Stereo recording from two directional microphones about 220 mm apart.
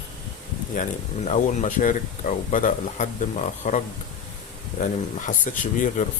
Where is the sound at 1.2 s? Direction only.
35° left (ahead or behind).